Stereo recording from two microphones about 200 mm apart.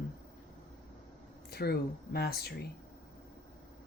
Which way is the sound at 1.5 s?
50° left (ahead or behind).